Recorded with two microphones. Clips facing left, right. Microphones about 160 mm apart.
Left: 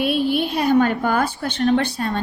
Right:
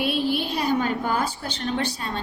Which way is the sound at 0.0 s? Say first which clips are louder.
Left 4 dB; 55° left (ahead or behind).